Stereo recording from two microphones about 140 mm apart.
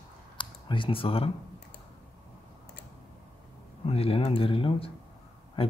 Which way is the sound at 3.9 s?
45° left (ahead or behind).